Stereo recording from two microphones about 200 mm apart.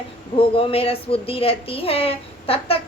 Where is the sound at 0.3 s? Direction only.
30° left (ahead or behind).